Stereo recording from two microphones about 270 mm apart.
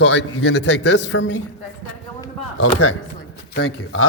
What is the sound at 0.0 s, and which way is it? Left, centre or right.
A man's voice, left.